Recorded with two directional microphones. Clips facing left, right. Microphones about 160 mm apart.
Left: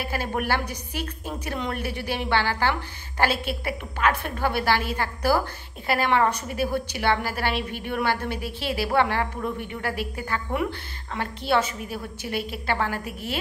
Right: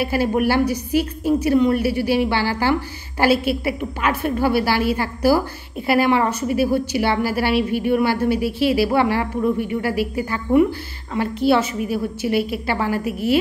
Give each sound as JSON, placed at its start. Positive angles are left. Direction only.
{"t": 0.0, "sound": "a woman's voice", "side_deg": -10}